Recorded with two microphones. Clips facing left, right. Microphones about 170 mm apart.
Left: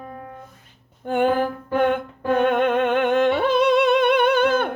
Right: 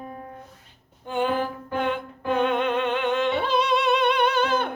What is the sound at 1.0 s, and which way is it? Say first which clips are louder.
Music: left 5 dB; 55° left (ahead or behind).